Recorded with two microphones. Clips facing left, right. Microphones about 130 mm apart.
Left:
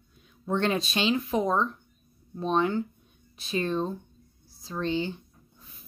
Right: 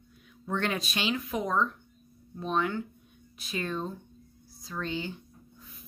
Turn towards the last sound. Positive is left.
turn(degrees=30)  # may be behind; listen again after turning